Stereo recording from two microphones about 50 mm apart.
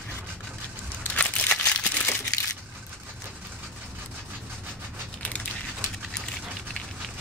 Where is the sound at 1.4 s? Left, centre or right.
Left.